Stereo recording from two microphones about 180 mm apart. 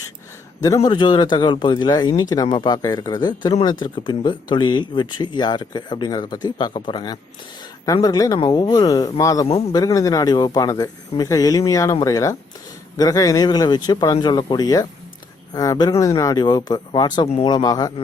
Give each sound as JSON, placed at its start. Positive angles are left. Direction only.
{"t": 0.6, "sound": "speech", "side_deg": 20}